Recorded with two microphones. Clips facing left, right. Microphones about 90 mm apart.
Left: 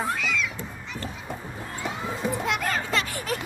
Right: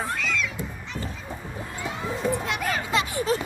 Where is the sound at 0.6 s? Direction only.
5° right (ahead or behind).